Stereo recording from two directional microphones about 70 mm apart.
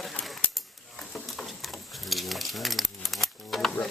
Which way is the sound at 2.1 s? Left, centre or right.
Centre.